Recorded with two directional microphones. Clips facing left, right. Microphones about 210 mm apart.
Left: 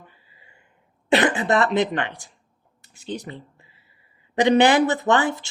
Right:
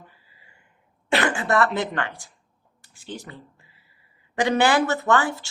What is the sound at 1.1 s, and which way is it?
Speech, 20° left (ahead or behind).